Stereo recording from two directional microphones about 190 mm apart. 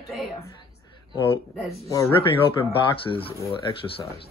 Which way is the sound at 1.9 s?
20° left (ahead or behind).